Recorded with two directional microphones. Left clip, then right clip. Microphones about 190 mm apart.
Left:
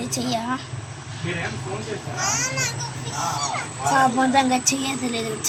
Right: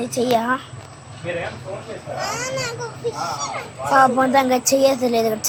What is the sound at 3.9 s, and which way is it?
Speech, 5° right (ahead or behind).